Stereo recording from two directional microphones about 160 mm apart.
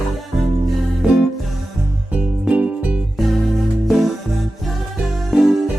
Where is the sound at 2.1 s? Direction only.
5° right (ahead or behind).